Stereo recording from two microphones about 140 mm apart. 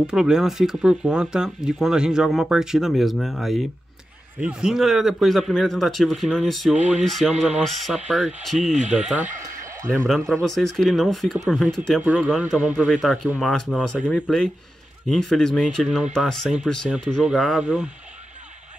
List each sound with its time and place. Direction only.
0.0 s speech: 5° right (ahead or behind)
9.1 s a sound: 15° right (ahead or behind)
9.9 s speech: centre (ahead or behind)
12.0 s speech: 10° right (ahead or behind)
13.4 s speech: centre (ahead or behind)
15.0 s speech: 5° left (ahead or behind)